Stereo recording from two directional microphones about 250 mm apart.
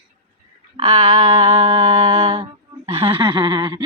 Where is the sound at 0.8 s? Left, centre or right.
Right.